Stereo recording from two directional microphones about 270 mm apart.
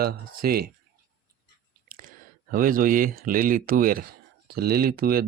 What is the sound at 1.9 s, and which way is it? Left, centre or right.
Speech, right.